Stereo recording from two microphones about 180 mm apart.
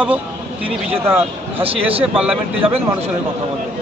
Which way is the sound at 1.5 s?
30° right (ahead or behind).